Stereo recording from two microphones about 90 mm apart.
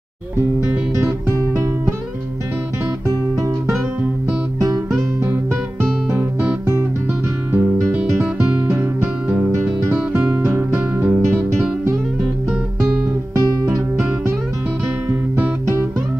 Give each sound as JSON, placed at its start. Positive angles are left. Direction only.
{"t": 5.2, "sound": "music", "side_deg": -25}
{"t": 7.5, "sound": "music", "side_deg": -20}
{"t": 13.7, "sound": "music", "side_deg": -30}